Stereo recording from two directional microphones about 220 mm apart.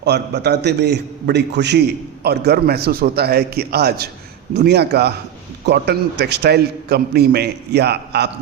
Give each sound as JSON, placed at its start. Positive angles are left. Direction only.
{"t": 0.0, "sound": "a man's voice", "side_deg": -50}